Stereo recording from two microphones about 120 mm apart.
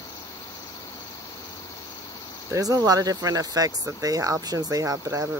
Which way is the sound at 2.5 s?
30° right (ahead or behind).